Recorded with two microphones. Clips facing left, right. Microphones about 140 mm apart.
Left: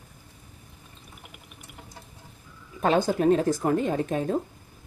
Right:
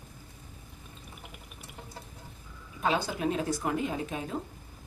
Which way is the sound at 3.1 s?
45° left (ahead or behind).